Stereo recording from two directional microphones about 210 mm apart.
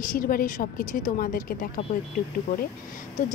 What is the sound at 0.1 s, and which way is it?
A woman's voice, 40° left (ahead or behind).